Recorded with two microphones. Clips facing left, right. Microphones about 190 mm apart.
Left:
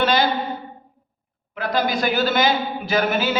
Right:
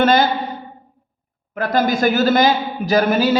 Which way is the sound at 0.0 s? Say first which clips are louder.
Right 5 dB; 45° right (ahead or behind).